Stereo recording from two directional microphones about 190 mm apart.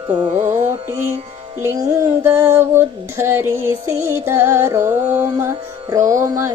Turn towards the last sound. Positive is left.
turn(degrees=-15)  # may be behind; listen again after turning